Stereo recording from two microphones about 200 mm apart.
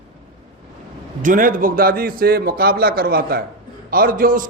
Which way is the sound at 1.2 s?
40° right (ahead or behind).